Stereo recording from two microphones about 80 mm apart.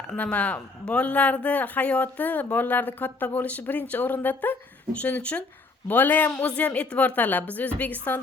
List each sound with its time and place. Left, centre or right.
0.1 s speech: centre